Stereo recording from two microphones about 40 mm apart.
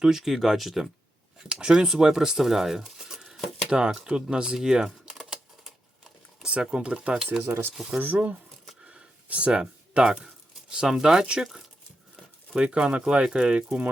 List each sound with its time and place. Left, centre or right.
0.0 s speech: centre
1.5 s speech: centre
5.1 s typing: centre
6.4 s speech: right
7.3 s speech: right
7.9 s speech: right
8.8 s a sound: right
10.8 s speech: centre
12.5 s speech: right